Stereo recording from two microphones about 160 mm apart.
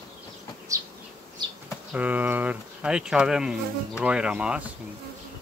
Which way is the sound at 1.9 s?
10° right (ahead or behind).